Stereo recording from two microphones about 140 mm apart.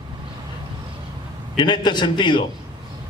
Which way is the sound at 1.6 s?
35° left (ahead or behind).